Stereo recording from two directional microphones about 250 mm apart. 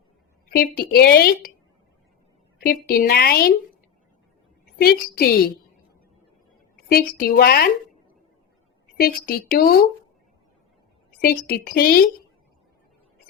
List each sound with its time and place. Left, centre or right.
0.8 s a woman's voice: left
2.6 s a woman's voice: left
4.8 s a woman's voice: left
6.8 s a woman's voice: left
9.0 s a woman's voice: left
11.2 s a woman's voice: left